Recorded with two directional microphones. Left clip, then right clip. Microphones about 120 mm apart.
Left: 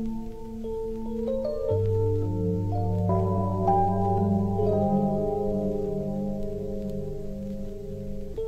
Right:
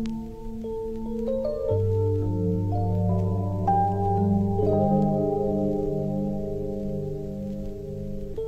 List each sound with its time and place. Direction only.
1.2 s music: centre (ahead or behind)